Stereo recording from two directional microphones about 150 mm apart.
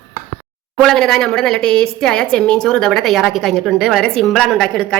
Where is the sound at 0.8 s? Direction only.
5° left (ahead or behind).